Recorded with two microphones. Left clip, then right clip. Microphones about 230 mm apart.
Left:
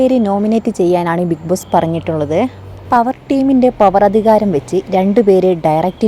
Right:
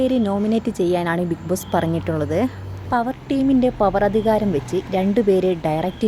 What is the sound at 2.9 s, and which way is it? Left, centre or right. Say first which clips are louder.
Speech: left 9 dB; left.